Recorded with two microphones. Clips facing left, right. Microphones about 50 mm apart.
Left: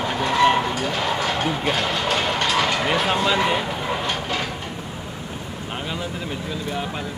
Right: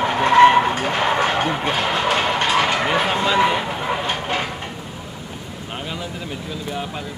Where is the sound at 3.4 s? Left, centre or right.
Centre.